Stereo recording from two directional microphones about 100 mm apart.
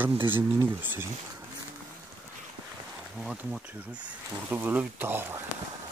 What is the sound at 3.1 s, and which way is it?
Speech, 10° right (ahead or behind).